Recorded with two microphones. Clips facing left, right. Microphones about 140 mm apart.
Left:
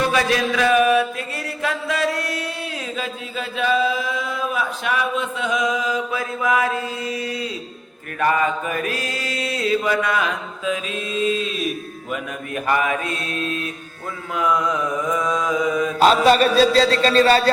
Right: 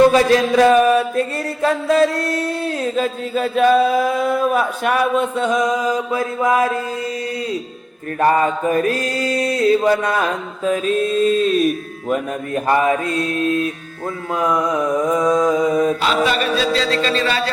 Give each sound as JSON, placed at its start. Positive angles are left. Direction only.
{"t": 0.0, "sound": "mantra", "side_deg": -35}
{"t": 8.2, "sound": "mantra", "side_deg": -35}
{"t": 12.5, "sound": "mantra", "side_deg": -30}
{"t": 16.0, "sound": "a man's voice", "side_deg": 40}